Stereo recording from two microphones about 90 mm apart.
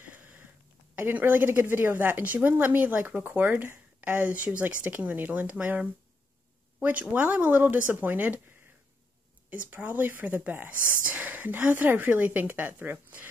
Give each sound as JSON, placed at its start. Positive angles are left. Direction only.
{"t": 0.0, "sound": "a sound", "side_deg": -15}
{"t": 0.9, "sound": "a woman's voice", "side_deg": -20}
{"t": 9.5, "sound": "a woman's voice", "side_deg": -20}